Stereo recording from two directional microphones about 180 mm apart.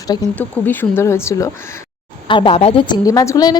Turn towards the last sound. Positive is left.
turn(degrees=20)  # may be behind; listen again after turning